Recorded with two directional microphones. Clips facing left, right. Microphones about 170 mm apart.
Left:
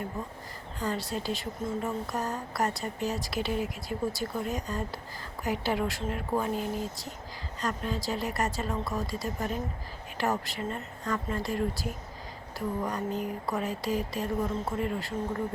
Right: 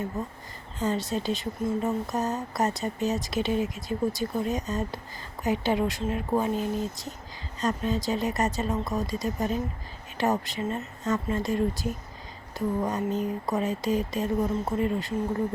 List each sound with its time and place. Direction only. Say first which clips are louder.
0.8 s a woman's voice: right 5 dB; 20° right (ahead or behind)